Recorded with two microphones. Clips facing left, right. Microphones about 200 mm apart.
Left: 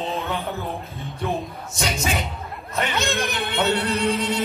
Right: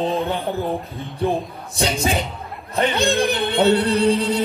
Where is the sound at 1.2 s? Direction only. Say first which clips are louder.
Right 5 dB; 30° right (ahead or behind).